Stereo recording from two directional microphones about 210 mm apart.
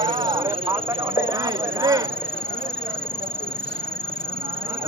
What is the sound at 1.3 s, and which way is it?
Speech, 15° right (ahead or behind).